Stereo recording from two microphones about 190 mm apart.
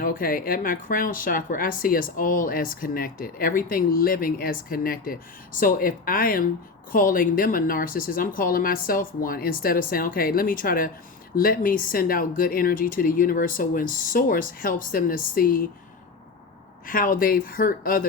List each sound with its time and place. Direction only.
0.0 s speech: 45° left (ahead or behind)
16.8 s speech: 45° left (ahead or behind)